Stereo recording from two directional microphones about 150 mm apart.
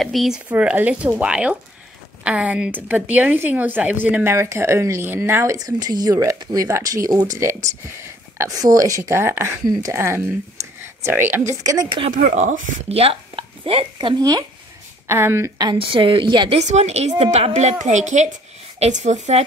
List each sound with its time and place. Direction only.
0.0 s a woman's voice: centre (ahead or behind); by 10.3 s 15° right (ahead or behind)
10.6 s a sound: 20° right (ahead or behind)
11.1 s speech: 15° right (ahead or behind)
12.1 s speech: 60° right (ahead or behind); by 14.4 s 30° right (ahead or behind)
15.0 s a woman's voice: 15° right (ahead or behind); by 16.5 s 30° right (ahead or behind)
16.5 s a woman's voice: 45° right (ahead or behind)